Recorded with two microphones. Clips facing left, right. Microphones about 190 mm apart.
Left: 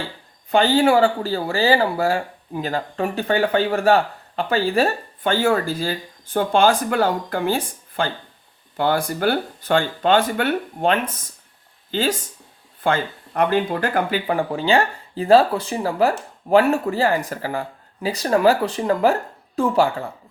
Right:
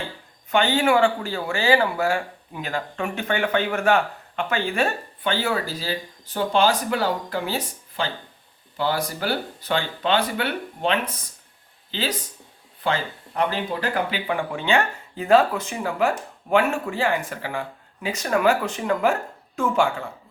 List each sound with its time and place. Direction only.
0.5 s speech: 35° left (ahead or behind)